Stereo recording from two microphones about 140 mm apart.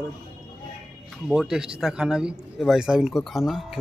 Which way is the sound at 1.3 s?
5° right (ahead or behind).